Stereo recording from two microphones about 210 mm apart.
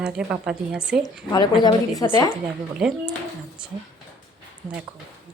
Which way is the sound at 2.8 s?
5° right (ahead or behind).